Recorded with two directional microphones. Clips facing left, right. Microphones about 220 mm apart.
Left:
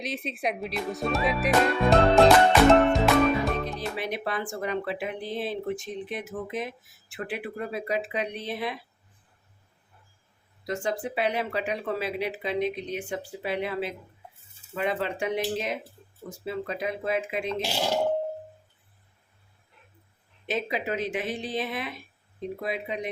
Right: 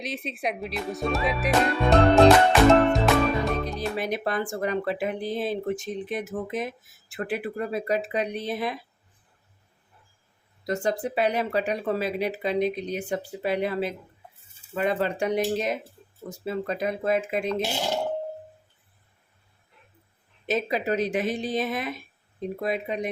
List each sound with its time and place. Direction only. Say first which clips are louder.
0.0 s speech: even; centre (ahead or behind)
3.8 s speech: right 3 dB; 40° right (ahead or behind)
10.7 s speech: right 3 dB; 40° right (ahead or behind)
20.5 s speech: right 4 dB; 40° right (ahead or behind)